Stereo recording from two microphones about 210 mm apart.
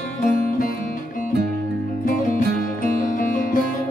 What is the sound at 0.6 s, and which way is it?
Music, 40° left (ahead or behind).